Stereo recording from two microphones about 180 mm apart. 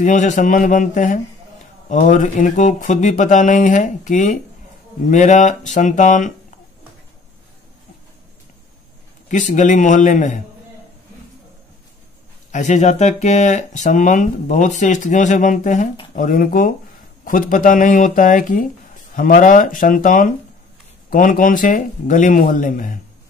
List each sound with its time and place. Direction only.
0.0 s speech: 45° left (ahead or behind)
9.3 s speech: 45° left (ahead or behind)
12.4 s speech: 45° left (ahead or behind)